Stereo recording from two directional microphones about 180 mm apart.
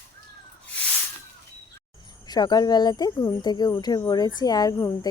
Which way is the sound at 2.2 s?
20° left (ahead or behind).